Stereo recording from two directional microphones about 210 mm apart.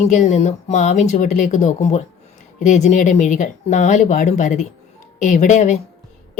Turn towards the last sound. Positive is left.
turn(degrees=35)  # may be behind; listen again after turning